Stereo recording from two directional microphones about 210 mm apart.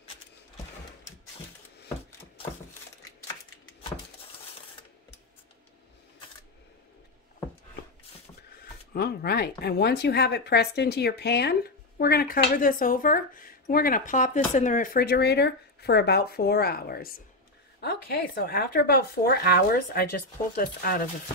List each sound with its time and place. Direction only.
8.9 s speech: 50° left (ahead or behind)